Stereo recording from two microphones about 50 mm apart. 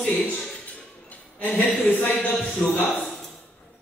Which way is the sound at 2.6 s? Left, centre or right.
Centre.